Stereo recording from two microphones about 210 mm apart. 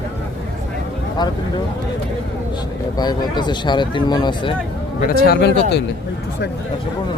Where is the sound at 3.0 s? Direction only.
20° left (ahead or behind).